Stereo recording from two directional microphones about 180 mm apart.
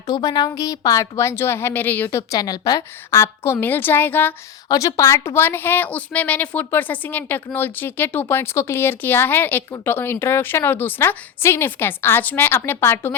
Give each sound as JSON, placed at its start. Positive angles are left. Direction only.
{"t": 0.1, "sound": "a woman's voice", "side_deg": 20}